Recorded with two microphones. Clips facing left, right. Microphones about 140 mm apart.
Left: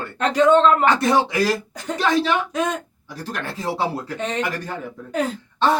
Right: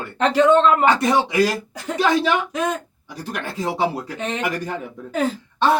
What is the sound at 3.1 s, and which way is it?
Speech, 15° right (ahead or behind).